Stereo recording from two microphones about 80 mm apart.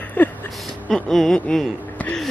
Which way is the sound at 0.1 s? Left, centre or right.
Left.